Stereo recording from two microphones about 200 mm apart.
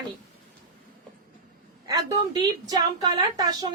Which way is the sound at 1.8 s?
20° right (ahead or behind).